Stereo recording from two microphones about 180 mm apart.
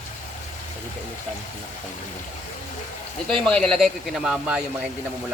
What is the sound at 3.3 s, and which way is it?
Speech, 5° left (ahead or behind).